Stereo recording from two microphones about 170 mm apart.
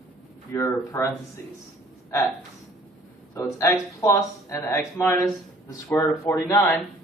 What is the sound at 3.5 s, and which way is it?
Speech, 15° left (ahead or behind).